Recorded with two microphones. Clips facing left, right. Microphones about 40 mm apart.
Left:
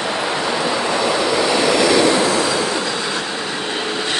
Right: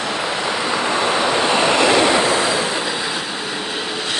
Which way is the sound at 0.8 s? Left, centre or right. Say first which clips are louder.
Even; right.